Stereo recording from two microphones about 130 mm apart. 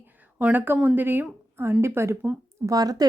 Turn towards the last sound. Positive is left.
turn(degrees=-30)  # may be behind; listen again after turning